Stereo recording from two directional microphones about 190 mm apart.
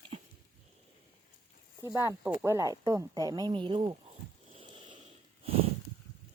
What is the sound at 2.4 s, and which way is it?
Speech, 15° right (ahead or behind).